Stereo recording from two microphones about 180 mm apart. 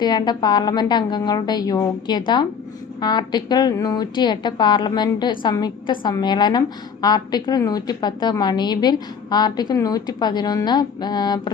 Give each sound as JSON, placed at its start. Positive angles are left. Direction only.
{"t": 0.0, "sound": "a woman's voice", "side_deg": 25}